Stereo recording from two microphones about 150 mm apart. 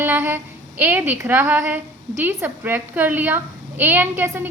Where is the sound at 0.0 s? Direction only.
15° right (ahead or behind).